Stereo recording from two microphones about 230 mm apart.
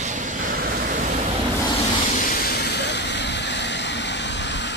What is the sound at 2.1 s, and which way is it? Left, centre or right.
Vehicle, left.